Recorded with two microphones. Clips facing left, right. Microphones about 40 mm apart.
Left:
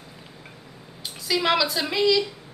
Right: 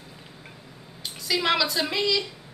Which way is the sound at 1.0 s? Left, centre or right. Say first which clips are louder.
Left 2 dB; centre.